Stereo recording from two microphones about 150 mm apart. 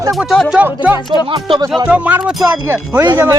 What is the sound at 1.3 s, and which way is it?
Speech, 35° right (ahead or behind).